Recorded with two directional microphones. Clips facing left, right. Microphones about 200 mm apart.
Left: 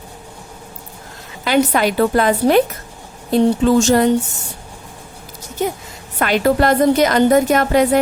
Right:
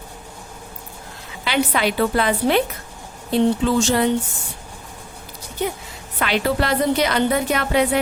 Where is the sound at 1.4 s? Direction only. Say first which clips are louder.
Left 5 dB; 45° left (ahead or behind).